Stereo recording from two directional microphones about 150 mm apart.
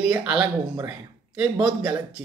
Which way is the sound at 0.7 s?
10° right (ahead or behind).